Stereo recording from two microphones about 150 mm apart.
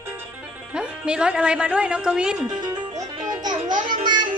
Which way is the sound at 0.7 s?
5° right (ahead or behind).